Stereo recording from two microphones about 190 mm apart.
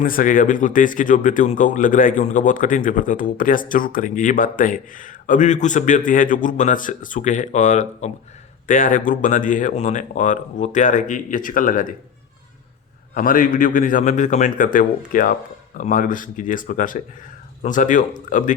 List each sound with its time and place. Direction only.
0.0 s speech: 45° left (ahead or behind)
13.1 s speech: 45° left (ahead or behind)